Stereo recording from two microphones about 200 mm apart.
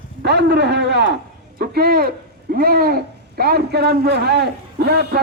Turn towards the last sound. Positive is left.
turn(degrees=-55)  # may be behind; listen again after turning